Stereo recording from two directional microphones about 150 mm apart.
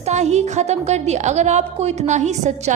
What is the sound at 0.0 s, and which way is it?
A woman's voice, 50° right (ahead or behind).